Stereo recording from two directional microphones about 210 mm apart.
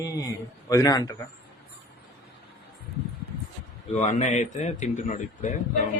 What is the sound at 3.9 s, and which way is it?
A man's voice, 30° left (ahead or behind).